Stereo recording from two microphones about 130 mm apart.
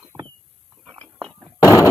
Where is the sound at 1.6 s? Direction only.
25° left (ahead or behind).